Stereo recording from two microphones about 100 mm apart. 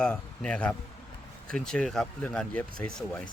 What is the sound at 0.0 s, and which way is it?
Speech, 10° left (ahead or behind).